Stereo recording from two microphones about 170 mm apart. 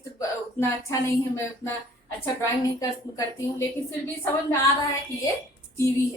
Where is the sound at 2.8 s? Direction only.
20° left (ahead or behind).